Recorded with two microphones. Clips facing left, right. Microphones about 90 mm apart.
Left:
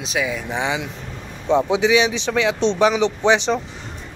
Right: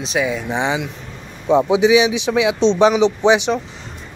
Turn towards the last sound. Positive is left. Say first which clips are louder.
# right 3 dB
turn(degrees=-15)  # may be behind; listen again after turning